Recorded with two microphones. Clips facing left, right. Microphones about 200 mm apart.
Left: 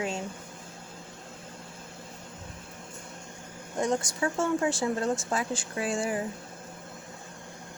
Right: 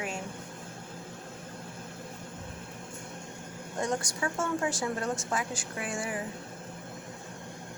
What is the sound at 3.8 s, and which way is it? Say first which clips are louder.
A woman's voice: left 4 dB; 20° left (ahead or behind).